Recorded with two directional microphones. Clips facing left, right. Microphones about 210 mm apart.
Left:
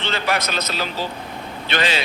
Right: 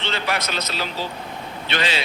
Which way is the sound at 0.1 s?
45° left (ahead or behind).